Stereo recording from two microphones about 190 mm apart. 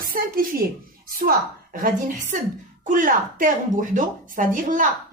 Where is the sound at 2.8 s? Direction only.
45° right (ahead or behind).